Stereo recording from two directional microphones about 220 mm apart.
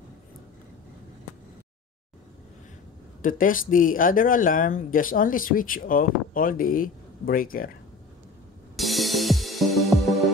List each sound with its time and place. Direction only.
3.2 s speech: 40° left (ahead or behind)
8.7 s music: centre (ahead or behind)